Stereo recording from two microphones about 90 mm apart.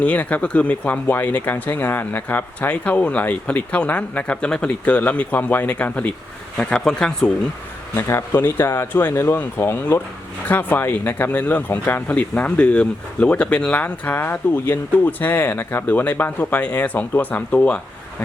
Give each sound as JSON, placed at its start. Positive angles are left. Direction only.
{"t": 0.0, "sound": "speech", "side_deg": 15}
{"t": 7.9, "sound": "speech", "side_deg": 30}